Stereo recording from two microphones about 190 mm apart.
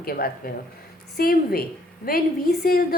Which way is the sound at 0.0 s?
50° left (ahead or behind).